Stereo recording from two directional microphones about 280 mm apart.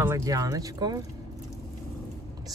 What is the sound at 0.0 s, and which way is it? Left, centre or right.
Speech, centre.